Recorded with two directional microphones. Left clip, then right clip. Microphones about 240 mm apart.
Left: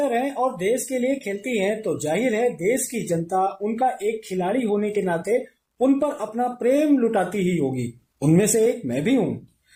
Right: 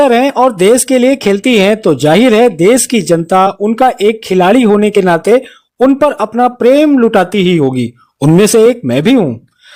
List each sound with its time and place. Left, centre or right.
0.0 s speech: right